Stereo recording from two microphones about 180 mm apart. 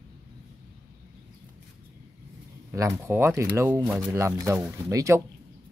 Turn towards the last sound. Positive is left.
turn(degrees=-15)  # may be behind; listen again after turning